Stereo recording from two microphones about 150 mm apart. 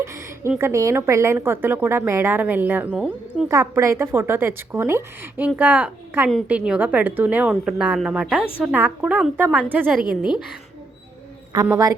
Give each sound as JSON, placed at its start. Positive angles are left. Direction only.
{"t": 0.0, "sound": "a sound", "side_deg": -20}
{"t": 0.6, "sound": "a woman's voice", "side_deg": -20}
{"t": 10.3, "sound": "a woman's voice", "side_deg": 0}
{"t": 11.7, "sound": "a woman's voice", "side_deg": -25}